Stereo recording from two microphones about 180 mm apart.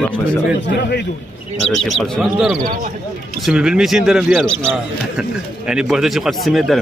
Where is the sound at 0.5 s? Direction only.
75° left (ahead or behind).